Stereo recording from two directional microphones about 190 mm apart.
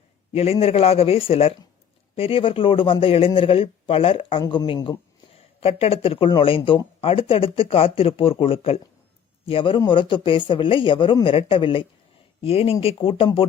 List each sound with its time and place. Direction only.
0.3 s a man's voice: 30° left (ahead or behind)